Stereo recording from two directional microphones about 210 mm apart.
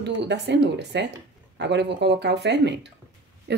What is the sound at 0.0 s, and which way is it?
Speech, 55° right (ahead or behind).